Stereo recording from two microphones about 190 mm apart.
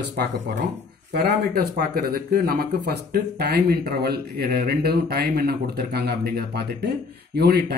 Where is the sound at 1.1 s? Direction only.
50° right (ahead or behind).